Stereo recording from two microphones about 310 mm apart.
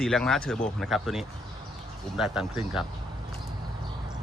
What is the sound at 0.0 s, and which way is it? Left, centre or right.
Speech, centre.